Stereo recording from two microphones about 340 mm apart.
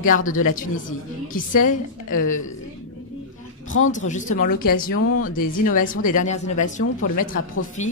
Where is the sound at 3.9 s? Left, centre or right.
Left.